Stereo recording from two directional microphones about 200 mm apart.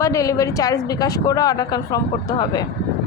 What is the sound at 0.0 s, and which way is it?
A woman's voice, 15° left (ahead or behind).